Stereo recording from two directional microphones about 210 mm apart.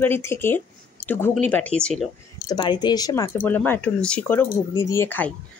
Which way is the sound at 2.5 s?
20° left (ahead or behind).